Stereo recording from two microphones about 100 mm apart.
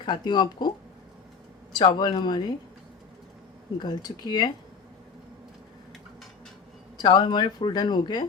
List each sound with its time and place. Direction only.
0.0 s speech: 50° left (ahead or behind)
1.7 s speech: 45° left (ahead or behind)
3.8 s speech: 45° left (ahead or behind)
7.0 s speech: 45° left (ahead or behind)